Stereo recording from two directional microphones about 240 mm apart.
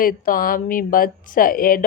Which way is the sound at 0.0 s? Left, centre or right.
Left.